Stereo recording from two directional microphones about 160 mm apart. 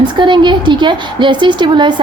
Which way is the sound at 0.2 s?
30° right (ahead or behind).